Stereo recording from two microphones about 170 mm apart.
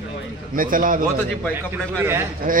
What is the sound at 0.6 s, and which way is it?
Speech, 55° right (ahead or behind).